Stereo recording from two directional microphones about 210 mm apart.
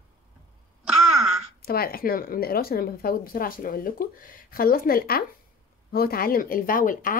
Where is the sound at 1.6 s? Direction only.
45° left (ahead or behind).